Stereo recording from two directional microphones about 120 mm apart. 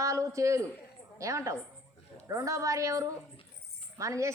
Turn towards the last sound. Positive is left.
turn(degrees=-25)  # may be behind; listen again after turning